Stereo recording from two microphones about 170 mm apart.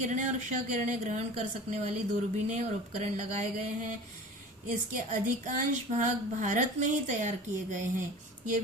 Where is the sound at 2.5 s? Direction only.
45° right (ahead or behind).